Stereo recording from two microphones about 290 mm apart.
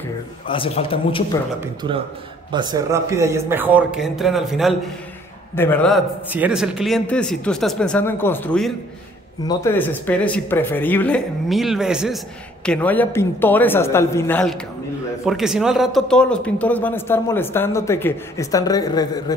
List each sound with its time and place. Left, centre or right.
0.5 s a man's voice: centre
1.6 s a man's voice: centre